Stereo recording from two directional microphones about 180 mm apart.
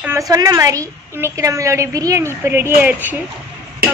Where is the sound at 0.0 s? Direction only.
15° right (ahead or behind).